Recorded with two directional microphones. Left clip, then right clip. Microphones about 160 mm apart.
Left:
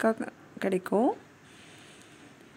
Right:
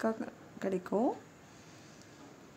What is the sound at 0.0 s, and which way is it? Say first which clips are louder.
Speech: left 7 dB; 25° left (ahead or behind).